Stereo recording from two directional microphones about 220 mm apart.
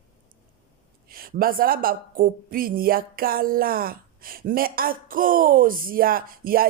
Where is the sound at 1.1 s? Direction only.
40° right (ahead or behind).